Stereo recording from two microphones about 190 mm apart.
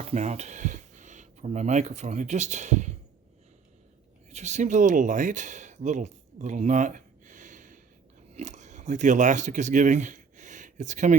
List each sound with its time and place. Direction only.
0.0 s speech: 35° right (ahead or behind)
4.3 s speech: 35° right (ahead or behind)